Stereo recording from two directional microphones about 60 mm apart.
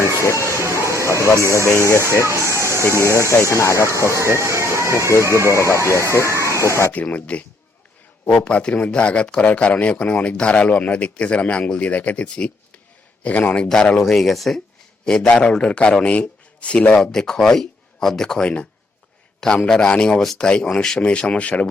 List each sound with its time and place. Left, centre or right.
0.0 s a sound: left
0.6 s a sound: right
1.5 s speech: left
2.2 s speech: right
2.6 s a sound: right
3.0 s speech: left
4.1 s speech: right
5.5 s speech: left
6.2 s a sound: right
6.5 s speech: left
6.9 s speech: left
13.7 s speech: centre